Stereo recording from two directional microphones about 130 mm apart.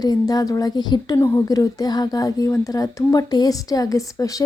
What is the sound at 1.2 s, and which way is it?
A woman's voice, 20° left (ahead or behind).